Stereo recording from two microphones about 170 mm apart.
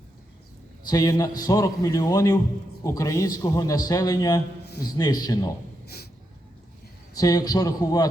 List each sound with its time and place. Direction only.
0.9 s a man's voice: 20° left (ahead or behind)
7.1 s a man's voice: 20° left (ahead or behind)